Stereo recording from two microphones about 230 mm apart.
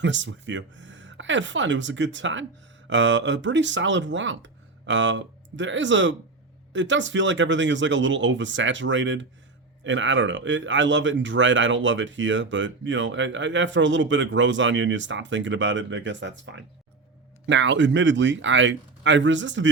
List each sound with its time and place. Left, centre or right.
0.0 s speech: right